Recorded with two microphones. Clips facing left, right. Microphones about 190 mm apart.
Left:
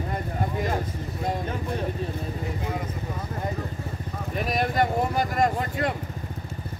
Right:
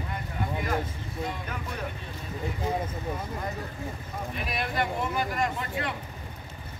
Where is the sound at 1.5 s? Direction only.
30° left (ahead or behind).